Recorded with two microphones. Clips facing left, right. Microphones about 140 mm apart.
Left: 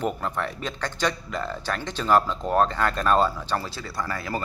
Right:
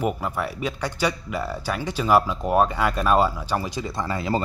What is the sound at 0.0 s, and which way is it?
Speech, 10° right (ahead or behind).